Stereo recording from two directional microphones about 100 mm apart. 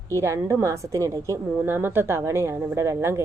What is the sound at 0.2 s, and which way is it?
A woman's voice, 30° right (ahead or behind).